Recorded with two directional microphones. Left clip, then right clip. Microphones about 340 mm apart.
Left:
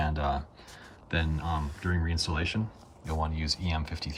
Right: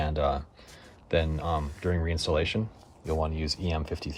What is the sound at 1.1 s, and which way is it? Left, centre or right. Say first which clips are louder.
Speech: right 5 dB; centre.